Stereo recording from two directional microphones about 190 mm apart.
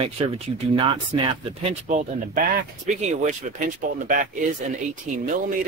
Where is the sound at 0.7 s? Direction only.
25° right (ahead or behind).